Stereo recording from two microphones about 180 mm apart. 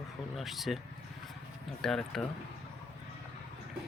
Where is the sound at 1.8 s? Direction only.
Centre (ahead or behind).